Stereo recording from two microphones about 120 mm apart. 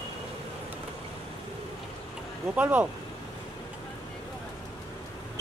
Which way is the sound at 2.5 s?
10° right (ahead or behind).